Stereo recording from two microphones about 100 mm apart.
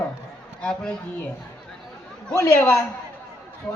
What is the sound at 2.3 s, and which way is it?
Speech, 25° left (ahead or behind).